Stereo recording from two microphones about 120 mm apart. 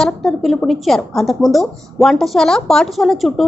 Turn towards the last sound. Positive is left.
turn(degrees=0)  # may be behind; listen again after turning